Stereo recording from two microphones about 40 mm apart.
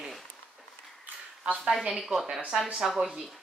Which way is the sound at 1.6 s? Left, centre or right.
Centre.